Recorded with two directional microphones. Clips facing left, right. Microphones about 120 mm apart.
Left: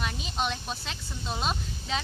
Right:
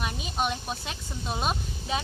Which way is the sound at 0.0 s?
10° right (ahead or behind).